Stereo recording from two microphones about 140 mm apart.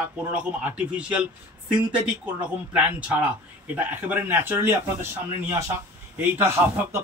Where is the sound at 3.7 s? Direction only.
10° right (ahead or behind).